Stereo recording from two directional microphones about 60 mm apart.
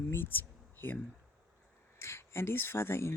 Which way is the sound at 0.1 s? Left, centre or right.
Left.